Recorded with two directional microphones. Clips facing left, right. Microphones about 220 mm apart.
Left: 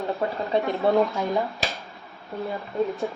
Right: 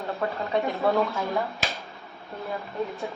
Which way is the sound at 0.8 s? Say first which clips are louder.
Left 4 dB; 15° left (ahead or behind).